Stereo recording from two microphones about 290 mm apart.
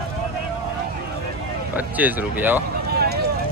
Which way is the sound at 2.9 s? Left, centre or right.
Right.